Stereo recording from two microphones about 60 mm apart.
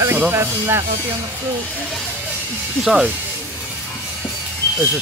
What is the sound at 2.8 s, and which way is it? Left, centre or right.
Speech, centre.